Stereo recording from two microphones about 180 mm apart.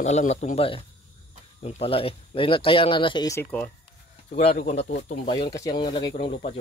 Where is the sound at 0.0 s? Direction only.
40° left (ahead or behind).